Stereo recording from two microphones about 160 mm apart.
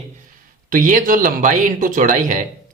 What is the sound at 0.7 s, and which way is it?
A man's voice, 55° right (ahead or behind).